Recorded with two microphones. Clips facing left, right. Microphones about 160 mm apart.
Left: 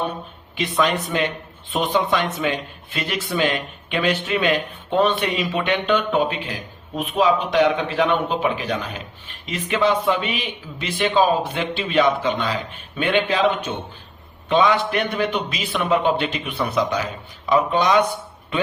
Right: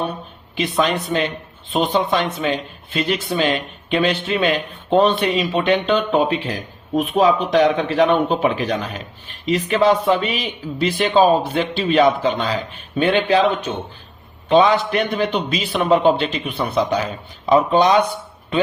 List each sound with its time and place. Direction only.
0.5 s speech: 35° right (ahead or behind)